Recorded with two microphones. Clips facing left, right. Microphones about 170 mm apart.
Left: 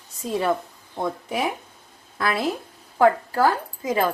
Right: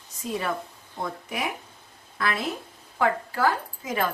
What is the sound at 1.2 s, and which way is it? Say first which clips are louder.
A woman's voice: left 5 dB; 30° left (ahead or behind).